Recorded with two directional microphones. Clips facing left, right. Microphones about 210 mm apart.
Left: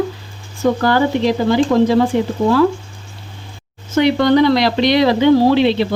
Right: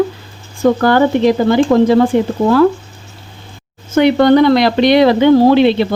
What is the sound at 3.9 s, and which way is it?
Speech, 50° right (ahead or behind).